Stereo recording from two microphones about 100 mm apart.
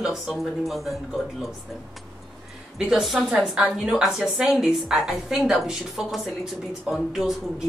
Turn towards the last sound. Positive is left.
turn(degrees=-5)  # may be behind; listen again after turning